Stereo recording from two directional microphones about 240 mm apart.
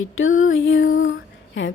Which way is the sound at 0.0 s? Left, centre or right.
Left.